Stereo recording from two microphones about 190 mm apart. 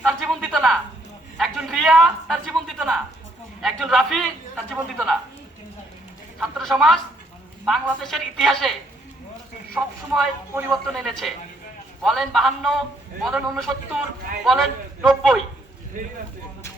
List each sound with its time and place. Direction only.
0.0 s a sound: centre (ahead or behind)
3.6 s a man's voice: centre (ahead or behind)
6.4 s a woman's voice: centre (ahead or behind)
9.7 s speech: 10° right (ahead or behind)
10.7 s a woman's voice: centre (ahead or behind)
16.0 s speech: 45° right (ahead or behind)